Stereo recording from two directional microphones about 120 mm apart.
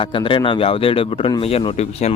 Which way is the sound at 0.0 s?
45° left (ahead or behind).